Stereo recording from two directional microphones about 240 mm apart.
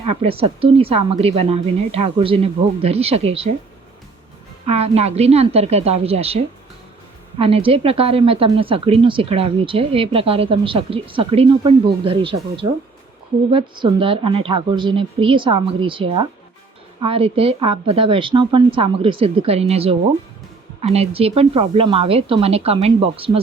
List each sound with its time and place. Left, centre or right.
0.0 s speech: right
4.6 s speech: right